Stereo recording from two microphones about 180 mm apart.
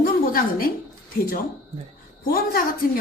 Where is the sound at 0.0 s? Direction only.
55° left (ahead or behind).